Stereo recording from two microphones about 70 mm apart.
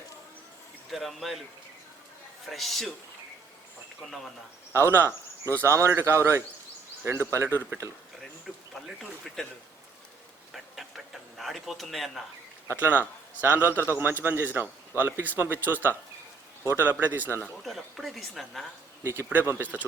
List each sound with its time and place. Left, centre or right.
0.9 s a woman's voice: centre
2.5 s a woman's voice: centre
4.0 s a woman's voice: centre
4.7 s speech: right
8.7 s a woman's voice: centre
10.5 s a sound: centre
12.6 s a man's voice: right
17.6 s a woman's voice: centre
19.5 s speech: right